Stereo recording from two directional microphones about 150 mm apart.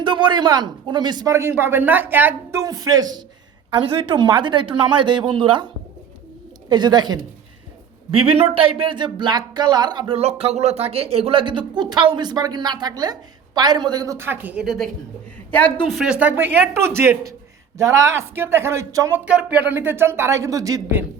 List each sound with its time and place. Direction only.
0.0 s speech: 30° right (ahead or behind)
3.7 s speech: 35° right (ahead or behind)
6.7 s speech: 30° right (ahead or behind)
8.1 s speech: 35° right (ahead or behind)
10.2 s speech: 45° right (ahead or behind); by 14.8 s centre (ahead or behind)
15.9 s speech: 5° right (ahead or behind); by 21.0 s 20° right (ahead or behind)